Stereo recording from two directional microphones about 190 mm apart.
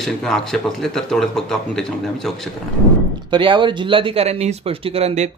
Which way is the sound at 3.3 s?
25° right (ahead or behind).